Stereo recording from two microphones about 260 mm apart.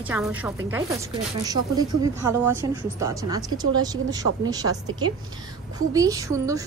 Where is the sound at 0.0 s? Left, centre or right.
Centre.